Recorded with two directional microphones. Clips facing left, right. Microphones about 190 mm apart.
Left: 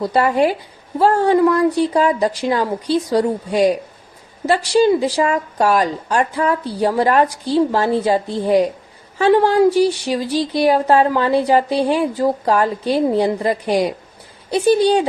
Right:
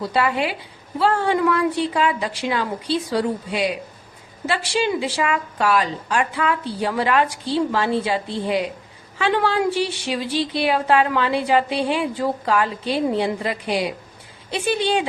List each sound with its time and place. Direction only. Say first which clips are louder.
0.1 s a woman's voice: left 6 dB; 40° left (ahead or behind)